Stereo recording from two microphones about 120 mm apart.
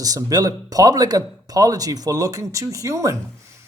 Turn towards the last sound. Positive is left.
turn(degrees=-25)  # may be behind; listen again after turning